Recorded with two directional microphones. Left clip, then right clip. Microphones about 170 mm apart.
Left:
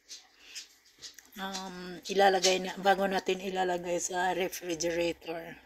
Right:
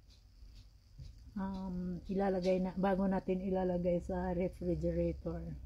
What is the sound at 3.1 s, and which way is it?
Speech, 25° left (ahead or behind).